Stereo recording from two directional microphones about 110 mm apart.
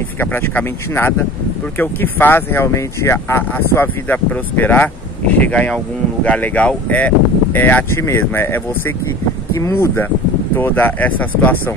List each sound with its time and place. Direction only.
0.2 s speech: 20° left (ahead or behind)